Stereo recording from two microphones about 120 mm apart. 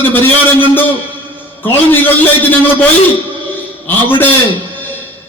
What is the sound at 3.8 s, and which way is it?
Speech, 15° left (ahead or behind).